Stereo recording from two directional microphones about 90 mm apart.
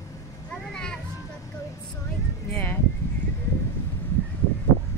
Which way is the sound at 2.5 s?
20° left (ahead or behind).